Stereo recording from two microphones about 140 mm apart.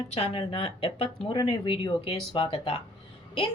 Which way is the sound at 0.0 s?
45° left (ahead or behind).